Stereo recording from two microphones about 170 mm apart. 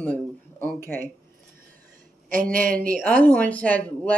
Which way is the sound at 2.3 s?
55° right (ahead or behind).